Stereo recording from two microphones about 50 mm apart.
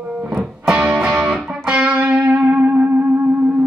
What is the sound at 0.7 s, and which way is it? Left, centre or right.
Music, right.